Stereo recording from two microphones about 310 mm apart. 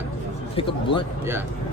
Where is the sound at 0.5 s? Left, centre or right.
Centre.